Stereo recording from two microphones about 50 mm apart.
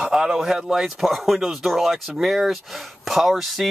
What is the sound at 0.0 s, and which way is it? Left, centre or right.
Speech, centre.